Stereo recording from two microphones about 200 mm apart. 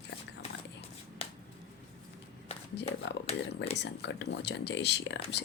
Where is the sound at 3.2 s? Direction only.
30° left (ahead or behind).